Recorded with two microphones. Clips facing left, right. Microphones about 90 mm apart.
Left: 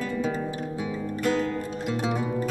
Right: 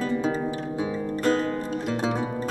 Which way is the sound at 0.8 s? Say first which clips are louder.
Right 3 dB; 35° right (ahead or behind).